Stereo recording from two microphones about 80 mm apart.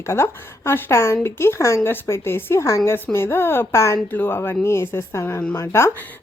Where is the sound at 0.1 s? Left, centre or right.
Left.